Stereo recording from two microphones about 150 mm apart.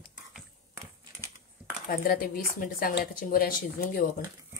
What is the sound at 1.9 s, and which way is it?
Speech, 75° left (ahead or behind).